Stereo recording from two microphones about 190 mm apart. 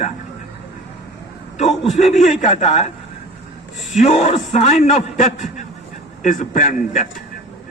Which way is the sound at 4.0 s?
35° left (ahead or behind).